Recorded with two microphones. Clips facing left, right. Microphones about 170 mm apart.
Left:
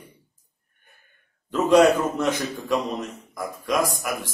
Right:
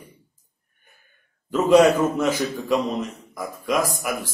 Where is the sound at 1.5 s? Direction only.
5° right (ahead or behind).